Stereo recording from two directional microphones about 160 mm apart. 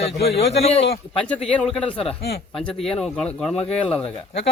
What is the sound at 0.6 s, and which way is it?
Speech, 40° left (ahead or behind).